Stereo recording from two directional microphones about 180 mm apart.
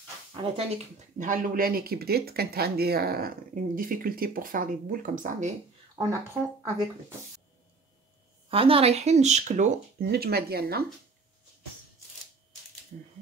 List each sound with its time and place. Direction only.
0.3 s speech: 30° right (ahead or behind); by 5.5 s 45° right (ahead or behind)
6.0 s speech: 20° right (ahead or behind)
8.5 s speech: 30° right (ahead or behind)
10.0 s speech: 60° right (ahead or behind)